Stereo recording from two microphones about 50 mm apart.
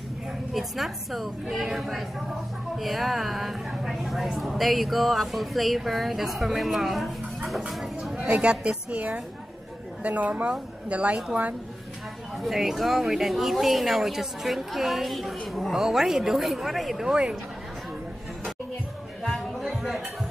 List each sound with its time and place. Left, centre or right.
0.5 s a woman's voice: centre
8.2 s a woman's voice: right
12.4 s a woman's voice: centre
17.0 s speech: centre
19.3 s a sound: centre